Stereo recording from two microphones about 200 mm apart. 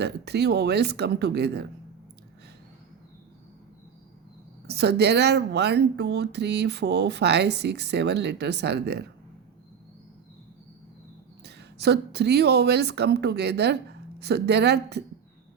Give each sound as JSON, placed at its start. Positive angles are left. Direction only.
{"t": 0.0, "sound": "speech", "side_deg": -55}
{"t": 4.6, "sound": "speech", "side_deg": -55}
{"t": 11.4, "sound": "speech", "side_deg": -55}